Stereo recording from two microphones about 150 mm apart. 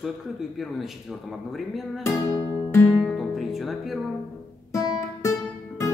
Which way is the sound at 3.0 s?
Centre (ahead or behind).